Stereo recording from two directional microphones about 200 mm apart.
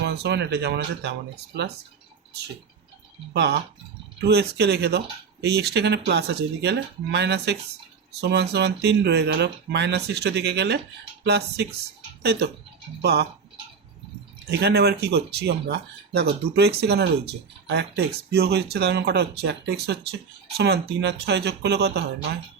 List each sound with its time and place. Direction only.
0.0 s speech: 55° right (ahead or behind)
3.3 s speech: 55° right (ahead or behind)
14.6 s speech: 55° right (ahead or behind)